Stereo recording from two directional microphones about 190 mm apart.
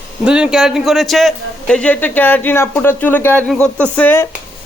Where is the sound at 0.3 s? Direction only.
5° right (ahead or behind).